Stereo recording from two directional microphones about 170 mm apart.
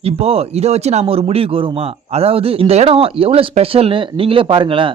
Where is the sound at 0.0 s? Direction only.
35° right (ahead or behind).